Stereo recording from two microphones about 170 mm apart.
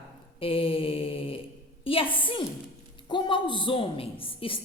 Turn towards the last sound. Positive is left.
turn(degrees=30)  # may be behind; listen again after turning